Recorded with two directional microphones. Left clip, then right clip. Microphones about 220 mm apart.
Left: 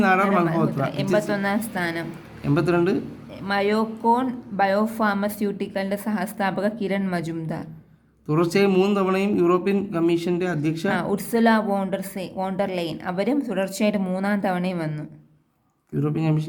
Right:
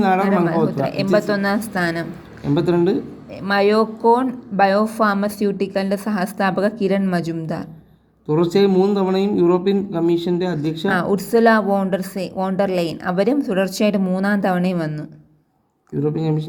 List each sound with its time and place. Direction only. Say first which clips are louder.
0.0 s a man's voice: right 2 dB; centre (ahead or behind)
1.1 s a woman's voice: right 4 dB; 15° right (ahead or behind)
2.4 s speech: right 3 dB; centre (ahead or behind)
3.4 s a woman's voice: right 6 dB; 15° right (ahead or behind)
8.3 s speech: right 4 dB; centre (ahead or behind)
10.8 s a woman's voice: right 7 dB; 15° right (ahead or behind)
16.0 s speech: right 4 dB; 5° left (ahead or behind)